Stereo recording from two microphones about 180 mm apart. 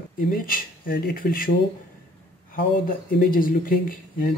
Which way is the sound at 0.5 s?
50° left (ahead or behind).